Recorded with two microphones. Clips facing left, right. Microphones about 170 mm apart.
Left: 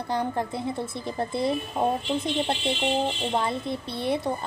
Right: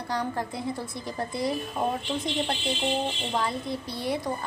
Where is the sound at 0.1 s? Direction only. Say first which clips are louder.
Left 3 dB; 25° left (ahead or behind).